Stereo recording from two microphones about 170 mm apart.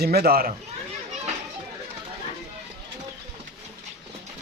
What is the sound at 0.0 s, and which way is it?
Speech, 65° right (ahead or behind).